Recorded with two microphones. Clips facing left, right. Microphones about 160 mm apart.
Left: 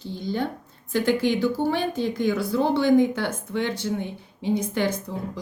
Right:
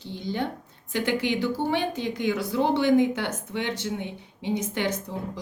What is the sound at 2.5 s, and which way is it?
A woman's voice, 15° right (ahead or behind).